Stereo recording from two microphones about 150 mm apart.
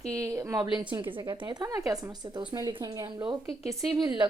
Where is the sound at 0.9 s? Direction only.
30° right (ahead or behind).